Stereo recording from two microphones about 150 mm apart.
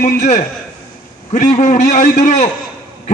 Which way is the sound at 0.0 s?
50° left (ahead or behind).